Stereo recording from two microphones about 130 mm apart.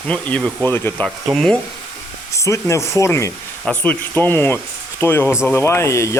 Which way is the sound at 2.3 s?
25° left (ahead or behind).